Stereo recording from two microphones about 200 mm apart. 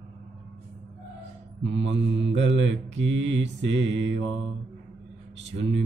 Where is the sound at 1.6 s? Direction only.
65° right (ahead or behind).